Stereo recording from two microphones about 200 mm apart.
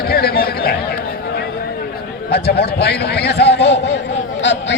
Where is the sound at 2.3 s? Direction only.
55° left (ahead or behind).